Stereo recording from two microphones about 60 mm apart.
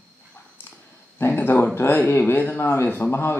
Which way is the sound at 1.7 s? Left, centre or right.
Left.